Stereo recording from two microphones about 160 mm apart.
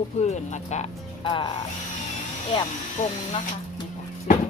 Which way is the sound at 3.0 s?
50° left (ahead or behind).